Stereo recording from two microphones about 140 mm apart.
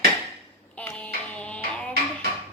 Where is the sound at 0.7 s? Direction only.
10° left (ahead or behind).